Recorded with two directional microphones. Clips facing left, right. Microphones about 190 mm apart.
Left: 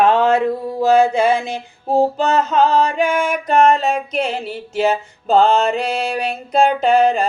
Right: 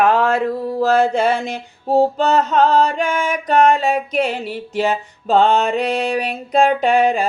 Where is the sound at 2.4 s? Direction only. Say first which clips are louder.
Right 1 dB; 5° left (ahead or behind).